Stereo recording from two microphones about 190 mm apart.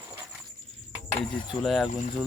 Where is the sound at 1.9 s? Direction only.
40° left (ahead or behind).